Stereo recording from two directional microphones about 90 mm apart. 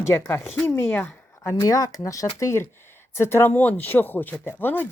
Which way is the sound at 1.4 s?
35° left (ahead or behind).